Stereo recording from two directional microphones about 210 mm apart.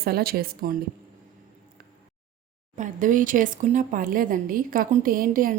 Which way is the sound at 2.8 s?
40° right (ahead or behind).